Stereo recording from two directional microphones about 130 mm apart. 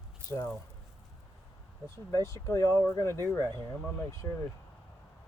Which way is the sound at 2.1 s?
25° left (ahead or behind).